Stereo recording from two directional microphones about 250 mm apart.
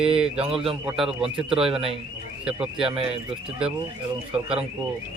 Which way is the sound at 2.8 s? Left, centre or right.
Right.